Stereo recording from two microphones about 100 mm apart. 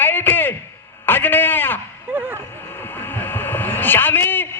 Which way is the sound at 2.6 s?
20° left (ahead or behind).